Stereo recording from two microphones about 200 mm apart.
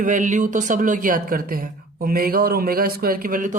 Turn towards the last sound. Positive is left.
turn(degrees=-45)  # may be behind; listen again after turning